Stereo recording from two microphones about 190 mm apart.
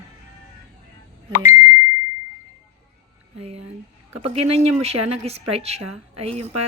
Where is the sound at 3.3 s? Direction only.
30° right (ahead or behind).